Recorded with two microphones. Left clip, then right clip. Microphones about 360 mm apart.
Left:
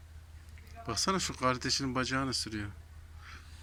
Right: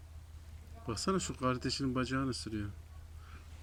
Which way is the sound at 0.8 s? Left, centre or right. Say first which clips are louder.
Left 4 dB; centre.